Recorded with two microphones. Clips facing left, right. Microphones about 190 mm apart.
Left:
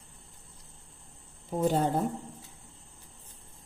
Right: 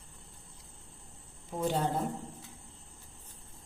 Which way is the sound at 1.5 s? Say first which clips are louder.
Left 5 dB; 40° left (ahead or behind).